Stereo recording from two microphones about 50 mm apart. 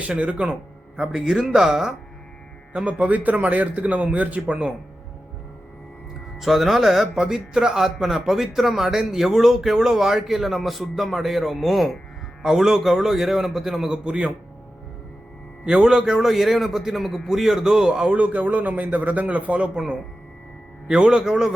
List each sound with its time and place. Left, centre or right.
0.0 s speech: right
1.0 s a man's voice: centre
2.7 s a man's voice: right
6.4 s speech: centre
13.9 s speech: centre
15.6 s a man's voice: centre
18.1 s a man's voice: right
19.7 s a man's voice: centre